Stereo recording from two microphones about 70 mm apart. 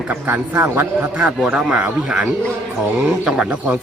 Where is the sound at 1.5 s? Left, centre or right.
Centre.